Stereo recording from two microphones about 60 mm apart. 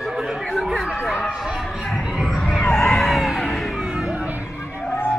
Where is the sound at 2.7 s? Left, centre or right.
Centre.